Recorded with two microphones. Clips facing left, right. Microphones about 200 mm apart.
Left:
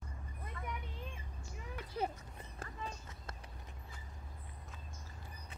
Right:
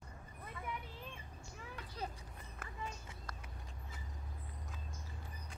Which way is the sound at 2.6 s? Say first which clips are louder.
Left 4 dB; 30° left (ahead or behind).